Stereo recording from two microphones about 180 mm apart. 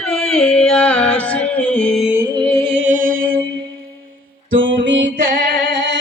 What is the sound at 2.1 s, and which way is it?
Music, 20° right (ahead or behind).